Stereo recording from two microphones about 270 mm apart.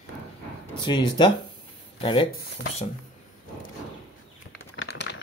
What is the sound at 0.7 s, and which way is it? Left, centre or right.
Speech, centre.